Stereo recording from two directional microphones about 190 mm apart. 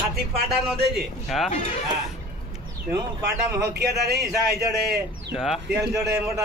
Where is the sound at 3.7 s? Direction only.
60° right (ahead or behind).